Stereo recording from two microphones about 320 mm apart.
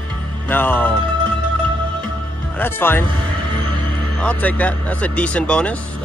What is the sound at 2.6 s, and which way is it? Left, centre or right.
Speech, centre.